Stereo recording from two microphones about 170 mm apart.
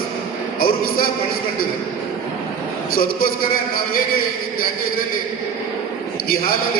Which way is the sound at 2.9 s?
60° left (ahead or behind).